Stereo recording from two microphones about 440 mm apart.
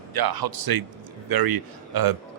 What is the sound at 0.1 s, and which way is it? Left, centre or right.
Speech, right.